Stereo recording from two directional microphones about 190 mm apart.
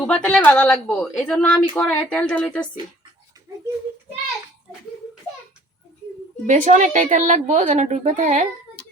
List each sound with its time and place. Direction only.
0.1 s a woman's voice: 5° left (ahead or behind)
6.4 s a woman's voice: 40° right (ahead or behind)